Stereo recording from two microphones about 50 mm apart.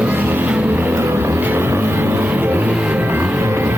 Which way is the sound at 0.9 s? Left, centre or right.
Right.